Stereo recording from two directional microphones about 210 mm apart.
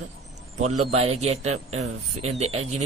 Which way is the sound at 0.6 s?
90° right.